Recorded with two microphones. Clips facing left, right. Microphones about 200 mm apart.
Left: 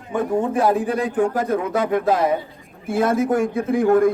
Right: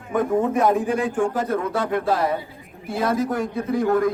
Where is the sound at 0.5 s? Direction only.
35° left (ahead or behind).